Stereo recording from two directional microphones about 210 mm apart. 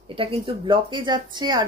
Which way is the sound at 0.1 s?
25° right (ahead or behind).